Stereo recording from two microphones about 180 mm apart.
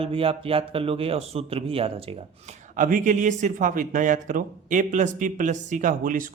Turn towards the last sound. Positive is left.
turn(degrees=-50)  # may be behind; listen again after turning